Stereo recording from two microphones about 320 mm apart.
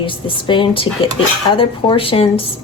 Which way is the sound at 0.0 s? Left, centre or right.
Centre.